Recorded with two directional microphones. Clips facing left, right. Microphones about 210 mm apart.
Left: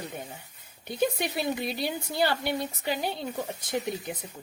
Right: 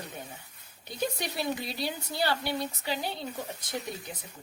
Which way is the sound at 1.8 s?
55° left (ahead or behind).